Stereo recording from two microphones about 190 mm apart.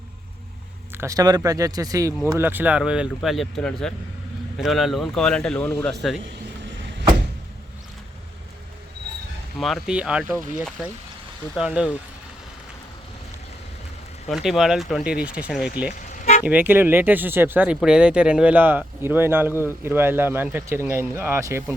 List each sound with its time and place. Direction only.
0.9 s speech: 15° right (ahead or behind); by 6.2 s centre (ahead or behind)
9.6 s speech: centre (ahead or behind)
14.3 s speech: centre (ahead or behind)
15.9 s toot: 40° left (ahead or behind)
16.4 s speech: 10° right (ahead or behind)